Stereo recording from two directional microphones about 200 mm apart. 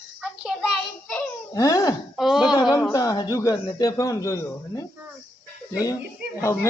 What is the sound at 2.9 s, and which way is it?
A man's voice, 15° left (ahead or behind).